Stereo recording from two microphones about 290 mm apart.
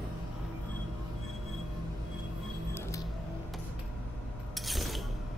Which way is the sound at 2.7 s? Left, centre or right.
Centre.